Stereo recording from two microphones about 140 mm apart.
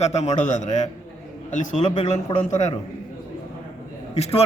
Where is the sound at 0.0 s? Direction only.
50° left (ahead or behind).